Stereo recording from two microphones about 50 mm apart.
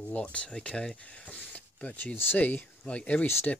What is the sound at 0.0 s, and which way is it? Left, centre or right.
Speech, left.